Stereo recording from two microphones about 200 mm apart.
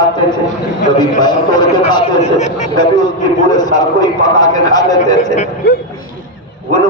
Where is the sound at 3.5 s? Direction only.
20° left (ahead or behind).